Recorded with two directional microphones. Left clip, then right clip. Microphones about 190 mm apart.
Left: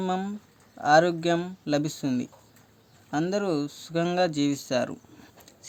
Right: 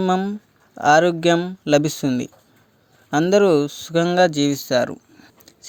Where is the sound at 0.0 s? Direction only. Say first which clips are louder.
Right 9 dB; 30° right (ahead or behind).